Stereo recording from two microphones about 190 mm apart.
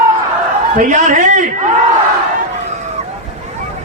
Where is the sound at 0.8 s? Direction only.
40° right (ahead or behind).